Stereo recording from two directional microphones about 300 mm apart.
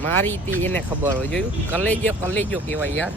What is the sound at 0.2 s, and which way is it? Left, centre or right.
Speech, centre.